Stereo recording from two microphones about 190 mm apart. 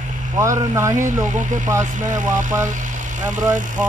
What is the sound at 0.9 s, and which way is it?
Speech, 40° right (ahead or behind).